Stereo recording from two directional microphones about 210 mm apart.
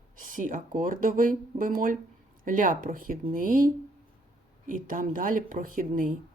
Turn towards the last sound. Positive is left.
turn(degrees=-40)  # may be behind; listen again after turning